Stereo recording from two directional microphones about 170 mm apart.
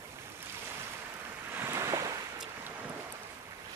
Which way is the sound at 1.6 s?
15° right (ahead or behind).